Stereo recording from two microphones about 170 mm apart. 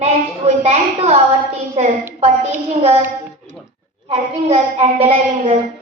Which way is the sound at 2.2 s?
40° right (ahead or behind).